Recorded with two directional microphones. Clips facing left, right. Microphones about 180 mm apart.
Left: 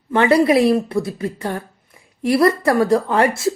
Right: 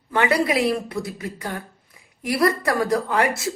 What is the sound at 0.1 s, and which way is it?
A woman's voice, 25° left (ahead or behind).